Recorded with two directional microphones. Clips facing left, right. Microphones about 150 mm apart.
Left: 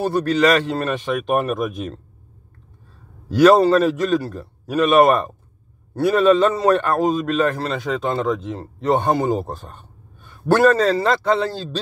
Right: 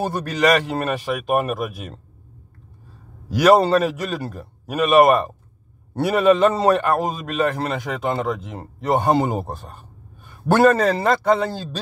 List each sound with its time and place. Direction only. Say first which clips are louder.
0.0 s speech: left 3 dB; 15° right (ahead or behind)
3.3 s speech: left 2 dB; 15° right (ahead or behind)